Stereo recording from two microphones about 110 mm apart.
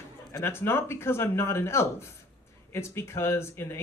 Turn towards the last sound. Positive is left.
turn(degrees=25)  # may be behind; listen again after turning